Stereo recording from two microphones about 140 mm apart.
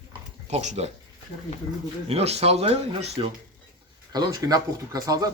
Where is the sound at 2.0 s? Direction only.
45° right (ahead or behind).